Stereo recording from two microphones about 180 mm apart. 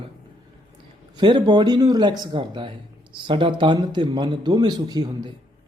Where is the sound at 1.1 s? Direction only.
25° right (ahead or behind).